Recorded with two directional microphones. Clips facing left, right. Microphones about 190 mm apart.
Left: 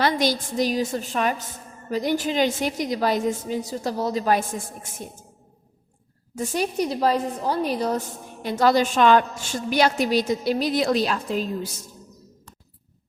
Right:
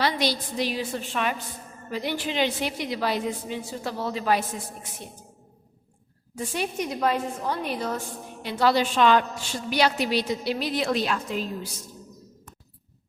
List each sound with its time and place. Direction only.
0.0 s a woman's voice: 45° left (ahead or behind)
6.3 s a woman's voice: 40° left (ahead or behind)